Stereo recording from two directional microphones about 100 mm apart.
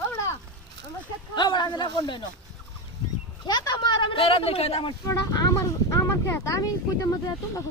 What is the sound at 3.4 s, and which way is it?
Speech, 45° left (ahead or behind).